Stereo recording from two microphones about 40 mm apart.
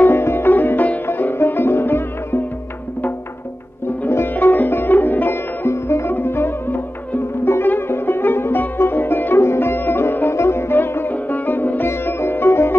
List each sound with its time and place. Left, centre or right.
0.1 s sitar: left
0.5 s sitar: left
1.2 s music: left
4.1 s sitar: left
6.2 s music: left
7.5 s music: left
7.9 s music: left
10.1 s sitar: left
11.8 s sitar: left